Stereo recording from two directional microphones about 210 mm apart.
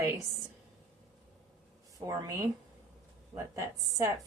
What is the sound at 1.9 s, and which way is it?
Speech, 15° right (ahead or behind).